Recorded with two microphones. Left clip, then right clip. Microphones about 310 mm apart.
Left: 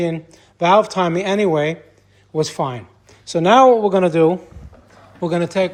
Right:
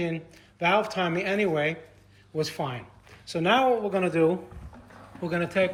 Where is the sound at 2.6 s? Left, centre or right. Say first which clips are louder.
Left 9 dB; left.